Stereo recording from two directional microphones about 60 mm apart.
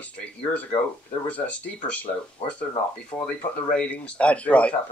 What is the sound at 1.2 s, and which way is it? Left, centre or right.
Speech, left.